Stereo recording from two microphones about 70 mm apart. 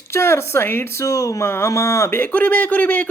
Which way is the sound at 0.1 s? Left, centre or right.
Left.